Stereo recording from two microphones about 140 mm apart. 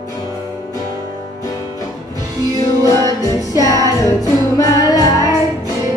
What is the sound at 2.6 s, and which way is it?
Music, 25° left (ahead or behind).